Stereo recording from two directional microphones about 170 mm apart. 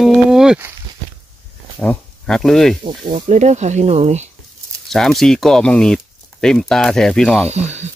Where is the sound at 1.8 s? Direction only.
5° left (ahead or behind).